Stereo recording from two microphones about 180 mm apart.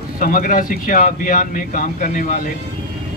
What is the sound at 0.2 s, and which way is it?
A man's voice, 50° left (ahead or behind).